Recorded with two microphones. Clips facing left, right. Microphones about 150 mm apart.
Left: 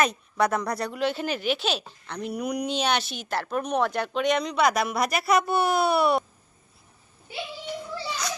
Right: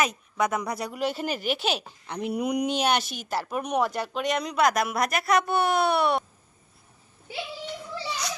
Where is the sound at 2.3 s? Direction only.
25° right (ahead or behind).